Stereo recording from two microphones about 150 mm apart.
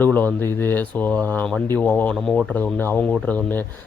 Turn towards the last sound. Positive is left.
turn(degrees=10)  # may be behind; listen again after turning